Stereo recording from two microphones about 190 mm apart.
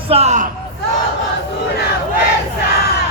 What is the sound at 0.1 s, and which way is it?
Speech, 35° right (ahead or behind).